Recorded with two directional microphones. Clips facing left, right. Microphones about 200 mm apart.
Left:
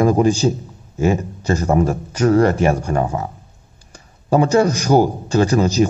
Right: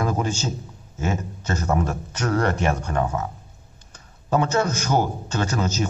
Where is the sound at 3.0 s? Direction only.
30° left (ahead or behind).